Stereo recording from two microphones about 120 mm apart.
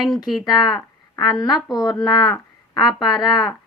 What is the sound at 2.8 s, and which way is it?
Speech, 35° left (ahead or behind).